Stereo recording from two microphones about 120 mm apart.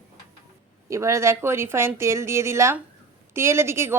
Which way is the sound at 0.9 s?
25° right (ahead or behind).